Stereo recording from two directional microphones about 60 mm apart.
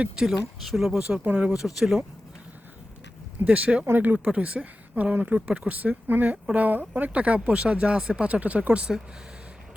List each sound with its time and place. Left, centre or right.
0.2 s speech: centre
1.2 s speech: right
1.5 s speech: centre
3.4 s speech: right
3.8 s speech: right
4.2 s speech: centre